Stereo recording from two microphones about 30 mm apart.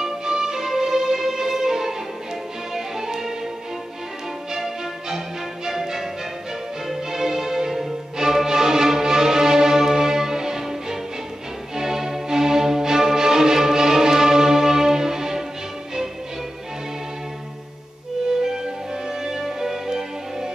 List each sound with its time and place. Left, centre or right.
0.0 s music: centre
4.5 s music: centre
7.1 s change ringing: centre
8.2 s music: centre
19.0 s music: centre